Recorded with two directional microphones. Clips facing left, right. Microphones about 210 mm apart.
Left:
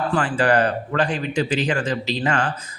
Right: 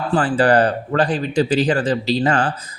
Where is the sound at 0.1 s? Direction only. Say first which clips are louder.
Right 5 dB; 35° right (ahead or behind).